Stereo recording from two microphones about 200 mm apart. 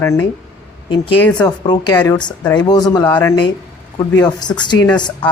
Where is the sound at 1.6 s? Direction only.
20° left (ahead or behind).